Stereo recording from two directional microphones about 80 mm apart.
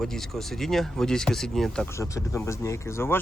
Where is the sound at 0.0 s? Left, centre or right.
Centre.